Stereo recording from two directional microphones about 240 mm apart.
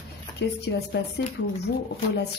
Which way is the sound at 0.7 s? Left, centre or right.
Left.